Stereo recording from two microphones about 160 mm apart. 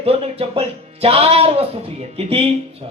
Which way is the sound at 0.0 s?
35° right (ahead or behind).